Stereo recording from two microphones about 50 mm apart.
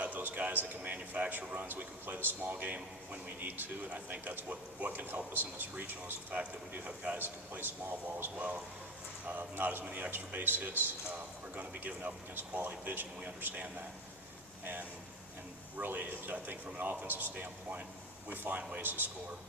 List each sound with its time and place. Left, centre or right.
0.2 s a sound: right
0.9 s a sound: right
1.3 s a man's voice: right
6.4 s a man's voice: right
9.2 s a man's voice: right
14.6 s a man's voice: right